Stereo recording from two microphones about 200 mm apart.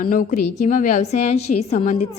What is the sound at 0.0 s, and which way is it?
A woman's voice, 40° left (ahead or behind).